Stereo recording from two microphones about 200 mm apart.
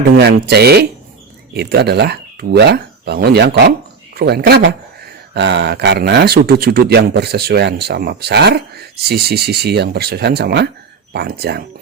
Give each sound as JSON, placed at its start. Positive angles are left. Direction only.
{"t": 0.2, "sound": "speech", "side_deg": -55}